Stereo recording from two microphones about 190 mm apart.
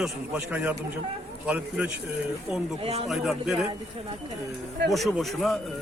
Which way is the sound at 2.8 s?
30° right (ahead or behind).